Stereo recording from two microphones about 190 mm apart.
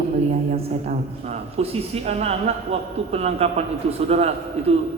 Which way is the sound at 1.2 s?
35° right (ahead or behind).